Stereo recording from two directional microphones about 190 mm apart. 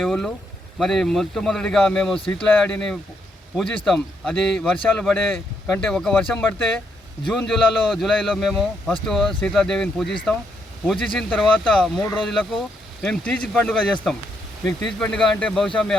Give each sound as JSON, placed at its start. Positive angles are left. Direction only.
{"t": 0.0, "sound": "a man's voice", "side_deg": 0}